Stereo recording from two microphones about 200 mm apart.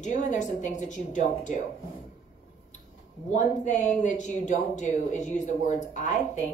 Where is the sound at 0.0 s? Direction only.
35° left (ahead or behind).